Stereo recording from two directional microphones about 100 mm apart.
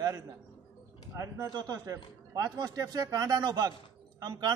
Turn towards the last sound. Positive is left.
turn(degrees=-40)  # may be behind; listen again after turning